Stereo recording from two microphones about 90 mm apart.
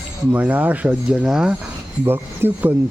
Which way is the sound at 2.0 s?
25° right (ahead or behind).